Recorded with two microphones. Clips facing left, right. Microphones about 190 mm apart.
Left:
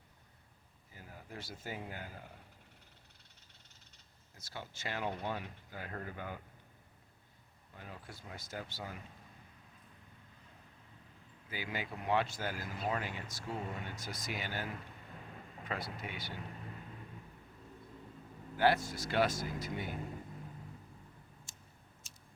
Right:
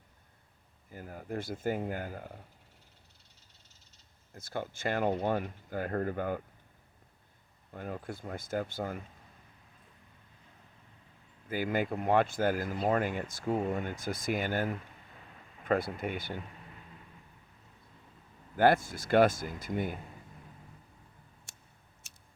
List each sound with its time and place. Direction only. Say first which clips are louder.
0.9 s speech: right 11 dB; 50° right (ahead or behind)
4.4 s speech: right 10 dB; 50° right (ahead or behind)
7.7 s speech: right 11 dB; 50° right (ahead or behind)
11.4 s speech: right 11 dB; 50° right (ahead or behind)
18.5 s speech: right 5 dB; 50° right (ahead or behind)
22.0 s a sound: left 1 dB; 65° right (ahead or behind)